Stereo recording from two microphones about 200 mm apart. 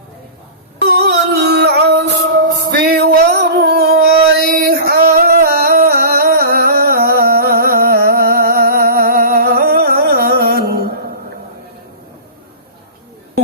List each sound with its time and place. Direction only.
0.9 s music: 50° right (ahead or behind)
4.4 s singing: 50° right (ahead or behind)